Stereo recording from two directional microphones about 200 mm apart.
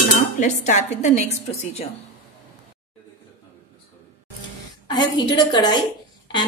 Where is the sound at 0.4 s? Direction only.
35° left (ahead or behind).